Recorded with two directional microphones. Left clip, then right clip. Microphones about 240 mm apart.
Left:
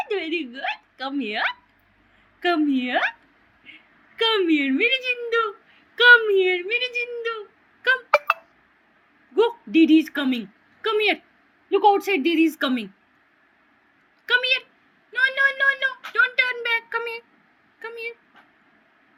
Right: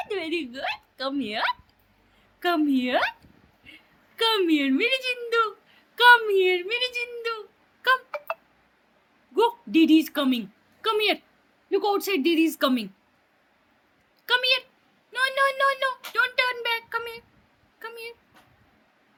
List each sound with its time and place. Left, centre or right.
0.1 s a woman's voice: right
4.2 s a woman's voice: right
9.3 s a woman's voice: right
14.3 s a sound: right
15.1 s speech: right
17.7 s dog: right